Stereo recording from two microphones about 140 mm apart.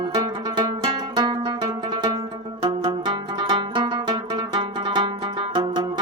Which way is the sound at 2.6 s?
30° right (ahead or behind).